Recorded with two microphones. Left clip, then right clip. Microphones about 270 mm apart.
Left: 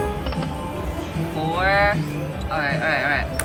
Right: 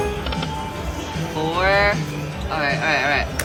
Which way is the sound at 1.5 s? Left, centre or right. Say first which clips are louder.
Right 1 dB; centre.